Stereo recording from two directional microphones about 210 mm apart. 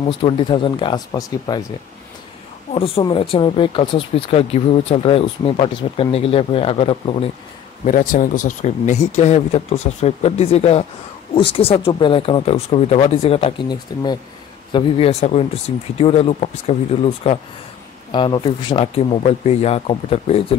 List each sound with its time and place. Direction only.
0.0 s speech: 25° left (ahead or behind)
2.7 s speech: 25° left (ahead or behind)
7.8 s speech: 40° left (ahead or behind)